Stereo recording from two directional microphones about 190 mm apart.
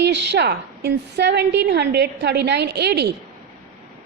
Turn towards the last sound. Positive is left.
turn(degrees=-60)  # may be behind; listen again after turning